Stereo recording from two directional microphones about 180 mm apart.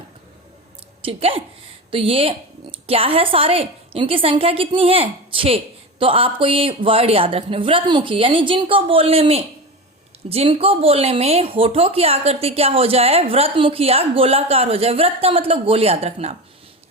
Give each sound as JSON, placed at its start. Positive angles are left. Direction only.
{"t": 1.0, "sound": "a woman's voice", "side_deg": -30}